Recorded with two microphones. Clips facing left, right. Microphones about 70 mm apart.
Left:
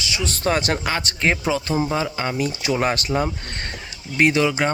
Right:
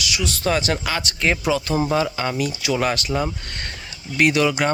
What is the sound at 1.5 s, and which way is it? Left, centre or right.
Speech, left.